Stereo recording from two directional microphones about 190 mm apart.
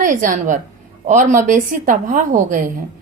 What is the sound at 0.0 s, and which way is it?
A woman's voice, 45° right (ahead or behind).